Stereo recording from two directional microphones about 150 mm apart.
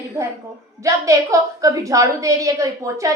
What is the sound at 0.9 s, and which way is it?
A woman's voice, 20° right (ahead or behind).